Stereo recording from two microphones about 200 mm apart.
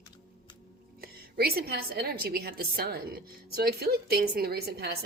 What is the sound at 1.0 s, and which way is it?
A woman's voice, 50° right (ahead or behind).